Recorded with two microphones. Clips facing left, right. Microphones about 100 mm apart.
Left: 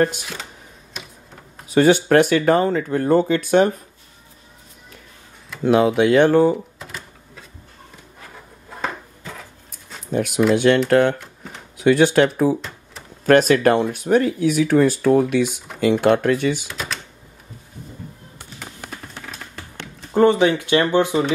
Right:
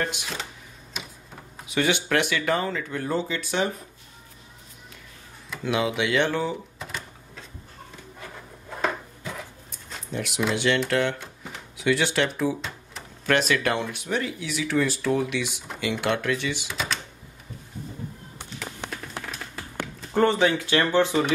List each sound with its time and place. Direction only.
0.2 s speech: centre (ahead or behind)
1.7 s speech: 40° left (ahead or behind)
5.6 s speech: 45° left (ahead or behind)
6.8 s a sound: centre (ahead or behind)
10.1 s speech: 50° left (ahead or behind)
16.6 s typing: centre (ahead or behind)
20.1 s speech: 15° left (ahead or behind)